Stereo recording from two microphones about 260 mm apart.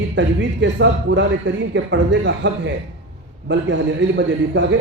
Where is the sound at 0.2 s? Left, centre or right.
Right.